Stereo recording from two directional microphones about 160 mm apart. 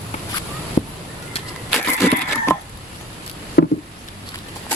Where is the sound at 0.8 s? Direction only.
35° left (ahead or behind).